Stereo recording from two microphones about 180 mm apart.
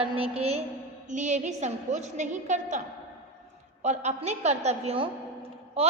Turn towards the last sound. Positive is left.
turn(degrees=-35)  # may be behind; listen again after turning